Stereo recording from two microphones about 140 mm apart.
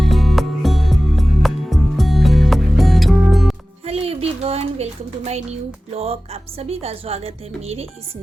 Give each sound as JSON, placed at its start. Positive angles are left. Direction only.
{"t": 0.0, "sound": "music", "side_deg": 0}
{"t": 3.8, "sound": "speech", "side_deg": -45}